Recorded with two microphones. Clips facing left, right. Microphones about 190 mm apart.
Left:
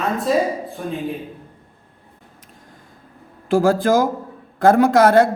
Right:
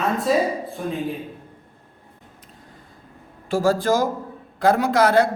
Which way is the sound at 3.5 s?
55° left (ahead or behind).